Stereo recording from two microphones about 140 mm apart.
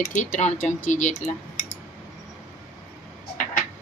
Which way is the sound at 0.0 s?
65° left (ahead or behind).